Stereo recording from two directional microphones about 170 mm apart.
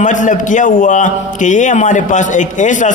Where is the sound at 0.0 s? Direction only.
50° left (ahead or behind).